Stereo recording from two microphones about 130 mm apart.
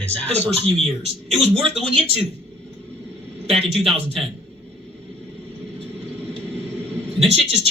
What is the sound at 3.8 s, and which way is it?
Speech, 45° right (ahead or behind).